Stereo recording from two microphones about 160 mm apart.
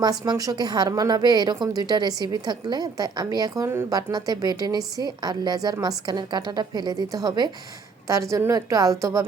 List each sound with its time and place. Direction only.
0.0 s a woman's voice: 25° right (ahead or behind)